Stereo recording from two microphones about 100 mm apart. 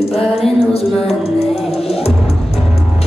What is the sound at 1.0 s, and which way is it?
Music, 90° left.